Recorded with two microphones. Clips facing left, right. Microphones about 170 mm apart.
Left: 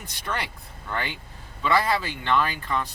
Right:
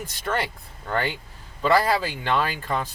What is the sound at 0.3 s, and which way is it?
Speech, 40° right (ahead or behind).